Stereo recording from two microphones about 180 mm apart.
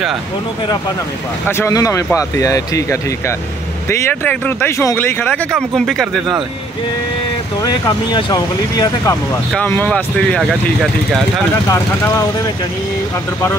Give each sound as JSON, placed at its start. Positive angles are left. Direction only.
{"t": 1.5, "sound": "speech", "side_deg": 15}
{"t": 7.6, "sound": "speech", "side_deg": 20}
{"t": 11.7, "sound": "speech", "side_deg": 20}